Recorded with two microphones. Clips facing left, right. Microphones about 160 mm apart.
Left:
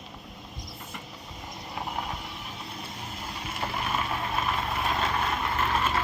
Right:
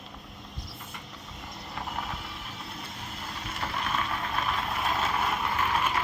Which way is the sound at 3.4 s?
10° left (ahead or behind).